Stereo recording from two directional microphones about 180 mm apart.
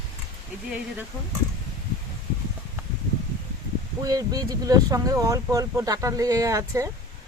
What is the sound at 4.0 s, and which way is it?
Speech, 20° right (ahead or behind).